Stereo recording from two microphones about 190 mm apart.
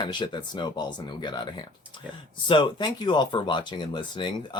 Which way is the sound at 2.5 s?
25° left (ahead or behind).